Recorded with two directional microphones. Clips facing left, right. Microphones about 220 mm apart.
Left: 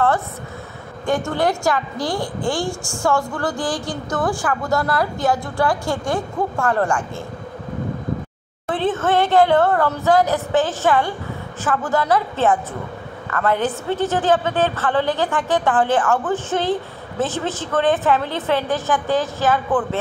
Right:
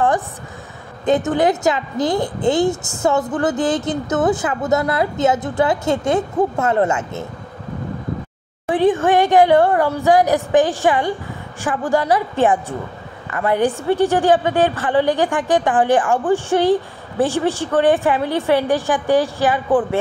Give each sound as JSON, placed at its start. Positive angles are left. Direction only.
{"t": 1.0, "sound": "a woman's voice", "side_deg": -20}
{"t": 8.6, "sound": "a woman's voice", "side_deg": -15}